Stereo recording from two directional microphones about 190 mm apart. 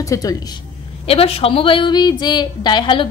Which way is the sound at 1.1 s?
30° left (ahead or behind).